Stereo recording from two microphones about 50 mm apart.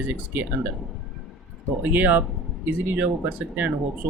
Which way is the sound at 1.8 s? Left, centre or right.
Right.